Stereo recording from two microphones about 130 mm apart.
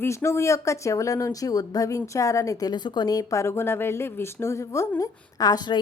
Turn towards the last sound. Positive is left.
turn(degrees=30)  # may be behind; listen again after turning